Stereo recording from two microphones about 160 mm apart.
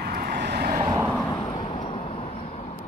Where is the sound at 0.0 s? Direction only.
70° right (ahead or behind).